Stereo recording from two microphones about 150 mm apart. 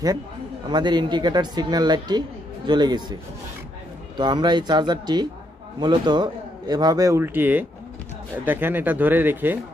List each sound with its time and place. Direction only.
0.7 s speech: 30° right (ahead or behind)
4.2 s speech: 30° right (ahead or behind); by 9.6 s 15° right (ahead or behind)